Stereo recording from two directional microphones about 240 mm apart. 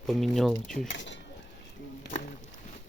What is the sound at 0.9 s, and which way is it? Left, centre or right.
Speech, left.